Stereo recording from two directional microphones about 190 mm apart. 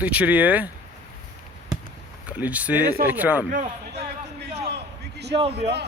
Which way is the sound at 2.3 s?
10° right (ahead or behind).